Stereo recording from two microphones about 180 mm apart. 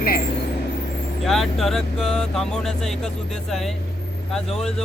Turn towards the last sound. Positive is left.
turn(degrees=5)  # may be behind; listen again after turning